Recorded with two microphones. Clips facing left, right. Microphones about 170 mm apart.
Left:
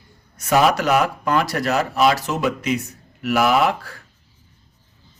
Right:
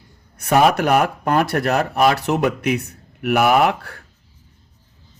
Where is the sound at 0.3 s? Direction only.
60° right (ahead or behind).